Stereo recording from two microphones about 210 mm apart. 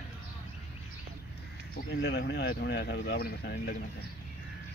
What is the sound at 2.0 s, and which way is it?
Speech, 55° left (ahead or behind).